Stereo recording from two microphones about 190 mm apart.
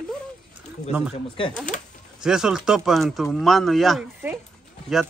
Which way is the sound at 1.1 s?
30° left (ahead or behind).